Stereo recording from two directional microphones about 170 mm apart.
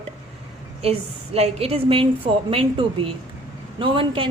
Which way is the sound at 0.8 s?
35° right (ahead or behind).